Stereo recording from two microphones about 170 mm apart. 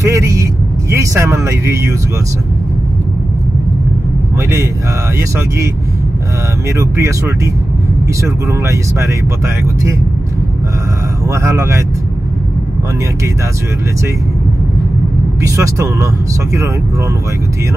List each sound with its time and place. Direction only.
0.0 s speech: 15° right (ahead or behind)
6.8 s speech: 15° right (ahead or behind)
11.2 s speech: 15° right (ahead or behind)
15.4 s speech: 20° right (ahead or behind)